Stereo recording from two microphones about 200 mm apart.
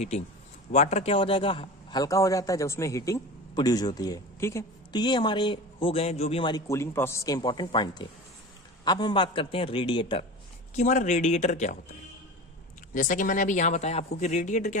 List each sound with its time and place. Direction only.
0.7 s a man's voice: 35° left (ahead or behind)
10.8 s speech: 40° left (ahead or behind)
12.9 s speech: 40° left (ahead or behind)